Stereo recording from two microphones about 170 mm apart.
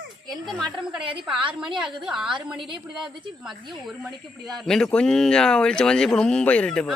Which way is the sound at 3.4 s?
Centre (ahead or behind).